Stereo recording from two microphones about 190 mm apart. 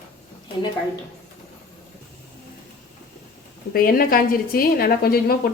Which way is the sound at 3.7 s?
50° left (ahead or behind).